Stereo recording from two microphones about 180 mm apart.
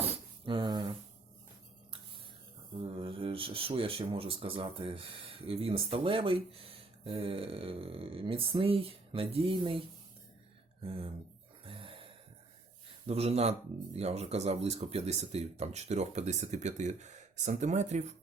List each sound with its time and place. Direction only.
0.0 s a sound: 30° right (ahead or behind)
2.9 s speech: 30° right (ahead or behind)
10.8 s speech: 30° right (ahead or behind)
11.6 s gasp: 30° right (ahead or behind)
13.1 s speech: 35° right (ahead or behind)